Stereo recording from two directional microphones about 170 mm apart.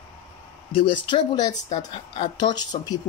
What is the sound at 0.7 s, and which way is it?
Speech, 30° left (ahead or behind).